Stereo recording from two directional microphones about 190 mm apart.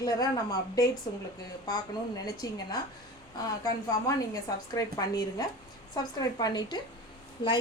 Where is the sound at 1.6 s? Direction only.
20° left (ahead or behind).